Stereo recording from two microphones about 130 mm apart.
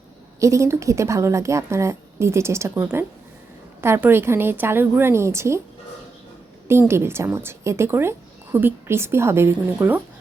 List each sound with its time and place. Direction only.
0.3 s a woman's voice: 25° right (ahead or behind)
6.7 s a woman's voice: 20° right (ahead or behind)